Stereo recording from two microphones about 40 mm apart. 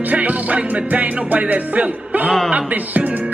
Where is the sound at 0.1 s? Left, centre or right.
Right.